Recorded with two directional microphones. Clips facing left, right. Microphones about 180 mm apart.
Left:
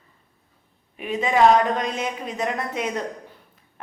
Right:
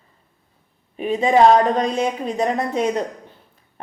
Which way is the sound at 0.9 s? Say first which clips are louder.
Right 5 dB; 30° right (ahead or behind).